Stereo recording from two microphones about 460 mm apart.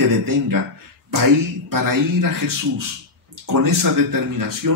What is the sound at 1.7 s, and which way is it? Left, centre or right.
Speech, right.